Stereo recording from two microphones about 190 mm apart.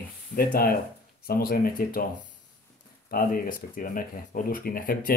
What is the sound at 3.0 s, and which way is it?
Speech, 50° left (ahead or behind).